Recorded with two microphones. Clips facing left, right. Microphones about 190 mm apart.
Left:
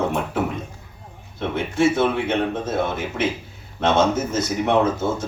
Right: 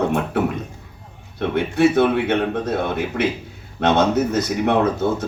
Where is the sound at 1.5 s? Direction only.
65° right (ahead or behind).